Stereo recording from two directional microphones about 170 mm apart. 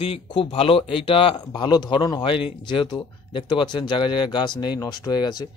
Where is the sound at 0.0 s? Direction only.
30° left (ahead or behind).